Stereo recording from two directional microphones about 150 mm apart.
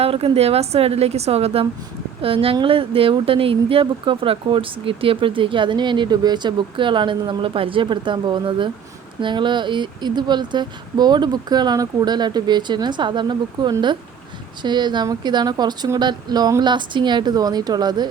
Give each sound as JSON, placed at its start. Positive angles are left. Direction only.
{"t": 0.0, "sound": "a woman's voice", "side_deg": -40}